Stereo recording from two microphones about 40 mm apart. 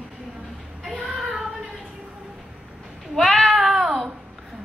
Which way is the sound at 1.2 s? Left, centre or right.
Centre.